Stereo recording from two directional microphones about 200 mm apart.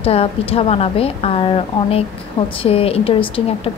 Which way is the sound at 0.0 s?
30° left (ahead or behind).